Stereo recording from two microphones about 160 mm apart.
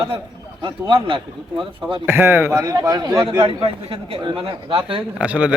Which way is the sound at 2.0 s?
10° right (ahead or behind).